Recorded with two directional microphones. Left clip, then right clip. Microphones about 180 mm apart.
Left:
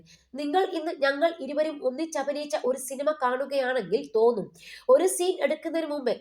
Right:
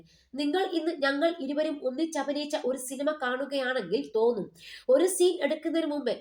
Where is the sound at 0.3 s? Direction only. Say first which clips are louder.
Left 2 dB; 20° left (ahead or behind).